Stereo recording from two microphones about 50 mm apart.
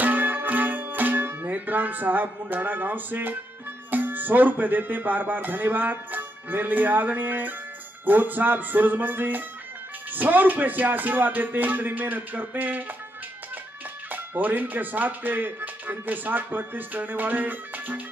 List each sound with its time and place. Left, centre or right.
0.0 s music: right
2.4 s speech: right
14.1 s speech: right